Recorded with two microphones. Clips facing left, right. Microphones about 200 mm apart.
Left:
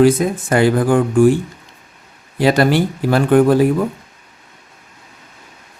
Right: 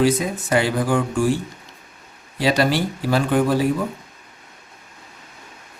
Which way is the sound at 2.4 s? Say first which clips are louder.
Left 5 dB; 55° left (ahead or behind).